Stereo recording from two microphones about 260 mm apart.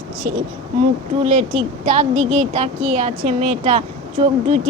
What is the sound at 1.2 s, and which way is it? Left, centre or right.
Speech, right.